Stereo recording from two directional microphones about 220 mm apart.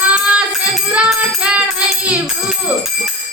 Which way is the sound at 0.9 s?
5° right (ahead or behind).